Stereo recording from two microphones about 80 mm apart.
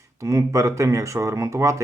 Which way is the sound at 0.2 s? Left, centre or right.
Right.